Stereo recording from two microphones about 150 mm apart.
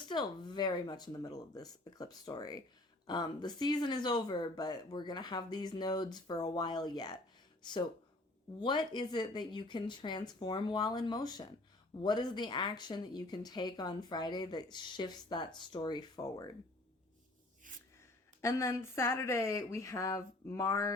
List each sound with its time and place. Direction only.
0.0 s speech: 30° left (ahead or behind)
17.7 s gasp: 60° right (ahead or behind)
18.4 s speech: 20° left (ahead or behind)